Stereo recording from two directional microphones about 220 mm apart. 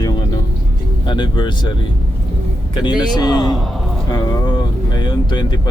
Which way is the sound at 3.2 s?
20° left (ahead or behind).